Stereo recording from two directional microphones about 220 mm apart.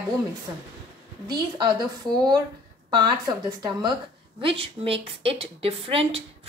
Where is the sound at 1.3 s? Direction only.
20° right (ahead or behind).